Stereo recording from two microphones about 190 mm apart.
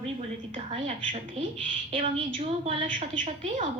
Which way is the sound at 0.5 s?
30° right (ahead or behind).